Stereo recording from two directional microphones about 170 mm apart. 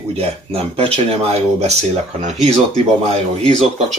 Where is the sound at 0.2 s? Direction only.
35° right (ahead or behind).